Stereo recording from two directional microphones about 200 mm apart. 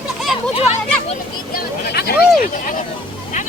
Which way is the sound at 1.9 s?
50° left (ahead or behind).